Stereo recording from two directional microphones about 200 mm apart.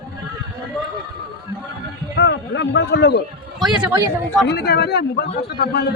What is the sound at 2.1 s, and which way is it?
Speech, 55° left (ahead or behind).